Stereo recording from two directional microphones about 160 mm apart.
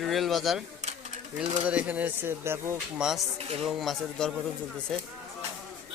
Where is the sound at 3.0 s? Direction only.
5° right (ahead or behind).